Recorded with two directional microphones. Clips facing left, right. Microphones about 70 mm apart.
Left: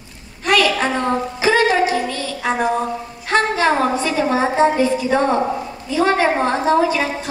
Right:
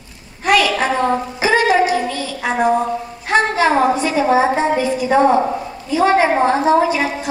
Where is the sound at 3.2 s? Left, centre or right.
Centre.